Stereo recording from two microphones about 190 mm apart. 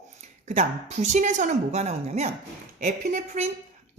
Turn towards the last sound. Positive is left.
turn(degrees=-40)  # may be behind; listen again after turning